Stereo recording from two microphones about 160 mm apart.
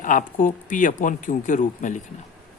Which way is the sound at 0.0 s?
55° left (ahead or behind).